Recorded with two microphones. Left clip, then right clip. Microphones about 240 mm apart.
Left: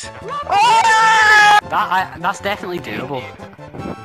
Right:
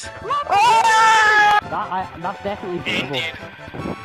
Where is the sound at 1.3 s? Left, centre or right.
Left.